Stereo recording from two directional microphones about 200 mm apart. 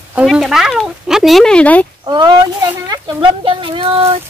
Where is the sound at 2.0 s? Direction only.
20° right (ahead or behind).